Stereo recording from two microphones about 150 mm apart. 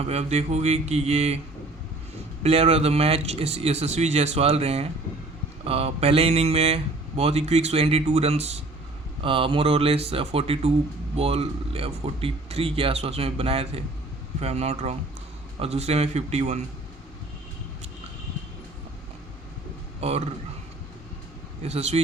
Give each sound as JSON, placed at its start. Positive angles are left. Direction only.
{"t": 0.0, "sound": "speech", "side_deg": -45}
{"t": 2.4, "sound": "speech", "side_deg": -45}
{"t": 20.0, "sound": "speech", "side_deg": -45}
{"t": 21.6, "sound": "speech", "side_deg": -45}